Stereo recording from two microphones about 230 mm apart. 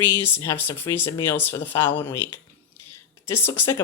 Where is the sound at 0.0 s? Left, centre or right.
Centre.